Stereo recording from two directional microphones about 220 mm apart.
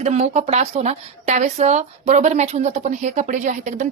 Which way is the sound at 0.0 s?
30° right (ahead or behind).